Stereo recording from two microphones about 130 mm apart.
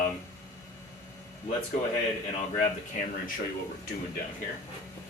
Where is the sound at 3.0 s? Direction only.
80° left.